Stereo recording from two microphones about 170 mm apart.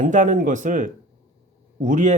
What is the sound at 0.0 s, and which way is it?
Speech, 50° right (ahead or behind).